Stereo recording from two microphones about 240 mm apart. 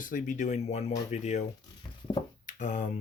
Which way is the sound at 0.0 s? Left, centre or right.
Left.